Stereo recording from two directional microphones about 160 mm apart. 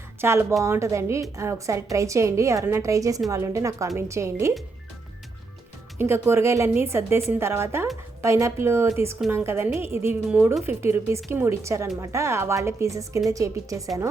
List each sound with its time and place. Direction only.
0.2 s a woman's voice: 15° right (ahead or behind)
6.0 s a woman's voice: 15° right (ahead or behind)